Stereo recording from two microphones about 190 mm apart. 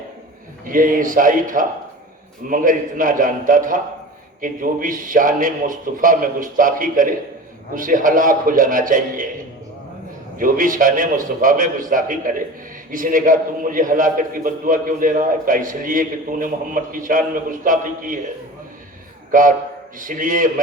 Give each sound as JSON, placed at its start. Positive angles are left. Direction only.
{"t": 0.6, "sound": "a man's voice", "side_deg": -45}
{"t": 10.3, "sound": "a man's voice", "side_deg": -45}
{"t": 19.3, "sound": "a man's voice", "side_deg": -45}